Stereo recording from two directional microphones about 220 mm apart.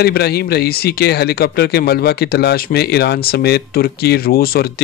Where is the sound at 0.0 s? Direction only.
45° left (ahead or behind).